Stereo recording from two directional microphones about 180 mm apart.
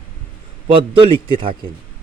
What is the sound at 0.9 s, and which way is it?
Speech, 30° right (ahead or behind).